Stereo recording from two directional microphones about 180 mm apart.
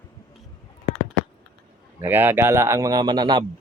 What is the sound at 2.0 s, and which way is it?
Speech, 10° right (ahead or behind).